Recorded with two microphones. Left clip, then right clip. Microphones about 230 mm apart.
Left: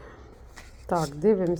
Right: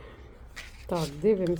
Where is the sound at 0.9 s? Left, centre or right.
Left.